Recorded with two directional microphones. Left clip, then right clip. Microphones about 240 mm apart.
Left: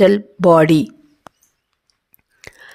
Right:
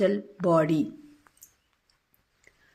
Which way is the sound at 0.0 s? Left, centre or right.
Left.